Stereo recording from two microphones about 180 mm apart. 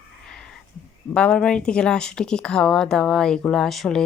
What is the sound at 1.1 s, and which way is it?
Speech, 5° left (ahead or behind).